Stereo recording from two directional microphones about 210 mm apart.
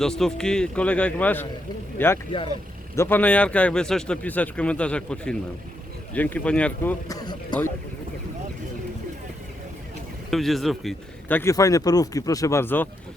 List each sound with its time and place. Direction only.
0.0 s speech: centre (ahead or behind)
2.9 s speech: 10° left (ahead or behind)
7.1 s speech: 20° left (ahead or behind)
10.3 s speech: centre (ahead or behind)